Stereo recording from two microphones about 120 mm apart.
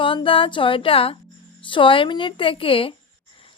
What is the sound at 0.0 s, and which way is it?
A woman's voice, 45° left (ahead or behind).